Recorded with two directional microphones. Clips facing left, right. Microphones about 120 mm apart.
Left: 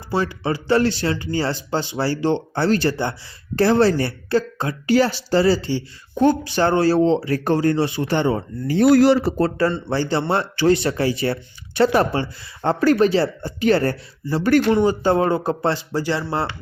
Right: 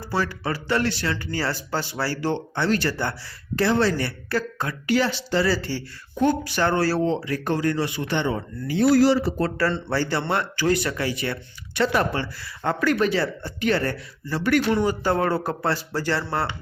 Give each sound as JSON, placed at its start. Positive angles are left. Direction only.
{"t": 0.1, "sound": "speech", "side_deg": 20}
{"t": 3.5, "sound": "speech", "side_deg": 35}
{"t": 8.8, "sound": "a man's voice", "side_deg": 55}
{"t": 9.9, "sound": "speech", "side_deg": 25}
{"t": 14.7, "sound": "speech", "side_deg": 20}